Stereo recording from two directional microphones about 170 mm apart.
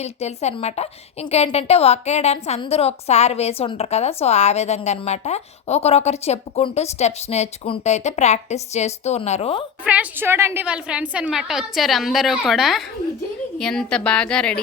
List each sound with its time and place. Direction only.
0.0 s a woman's voice: 40° left (ahead or behind)
9.8 s a woman's voice: 10° right (ahead or behind)